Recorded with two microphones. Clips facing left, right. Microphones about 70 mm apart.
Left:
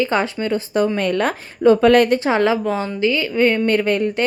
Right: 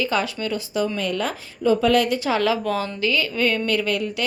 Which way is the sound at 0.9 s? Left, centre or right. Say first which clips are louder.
Left 6 dB; left.